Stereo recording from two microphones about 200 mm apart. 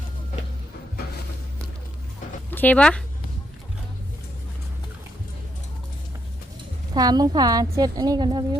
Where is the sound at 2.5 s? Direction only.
10° left (ahead or behind).